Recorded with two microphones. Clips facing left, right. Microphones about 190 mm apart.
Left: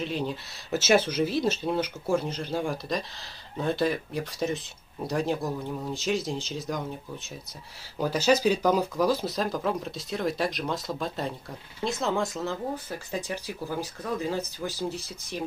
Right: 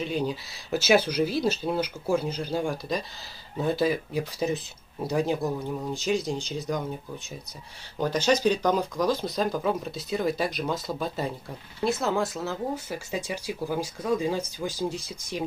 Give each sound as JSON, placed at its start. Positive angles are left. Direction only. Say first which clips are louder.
{"t": 0.0, "sound": "speech", "louder": "right 2 dB", "side_deg": 0}
{"t": 8.0, "sound": "speech", "louder": "even", "side_deg": 5}